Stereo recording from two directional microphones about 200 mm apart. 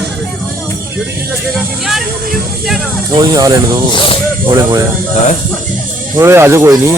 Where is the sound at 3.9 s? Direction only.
25° left (ahead or behind).